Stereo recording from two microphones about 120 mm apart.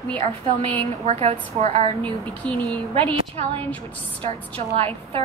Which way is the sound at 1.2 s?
60° right (ahead or behind).